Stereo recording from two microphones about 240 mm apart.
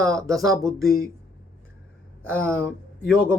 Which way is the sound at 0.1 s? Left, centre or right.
Centre.